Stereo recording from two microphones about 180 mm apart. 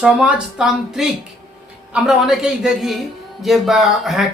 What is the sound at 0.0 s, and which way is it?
Speech, 5° right (ahead or behind).